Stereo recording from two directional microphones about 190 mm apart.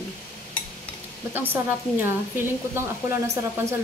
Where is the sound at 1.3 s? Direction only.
10° right (ahead or behind).